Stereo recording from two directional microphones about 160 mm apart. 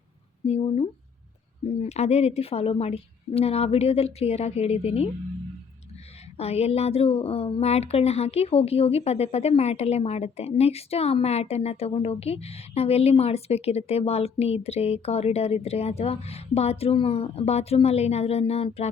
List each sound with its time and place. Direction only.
0.4 s speech: 40° left (ahead or behind)
6.3 s speech: 40° left (ahead or behind)